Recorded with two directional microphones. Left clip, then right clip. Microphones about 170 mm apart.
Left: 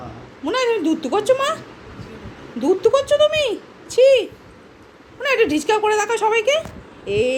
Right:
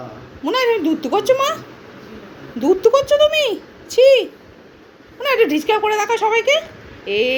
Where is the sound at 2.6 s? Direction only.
5° left (ahead or behind).